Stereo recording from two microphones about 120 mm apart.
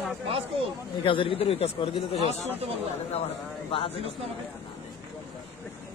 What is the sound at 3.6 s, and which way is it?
Speech, 50° left (ahead or behind).